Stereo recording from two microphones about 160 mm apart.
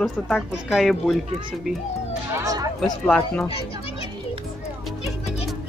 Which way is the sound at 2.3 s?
20° right (ahead or behind).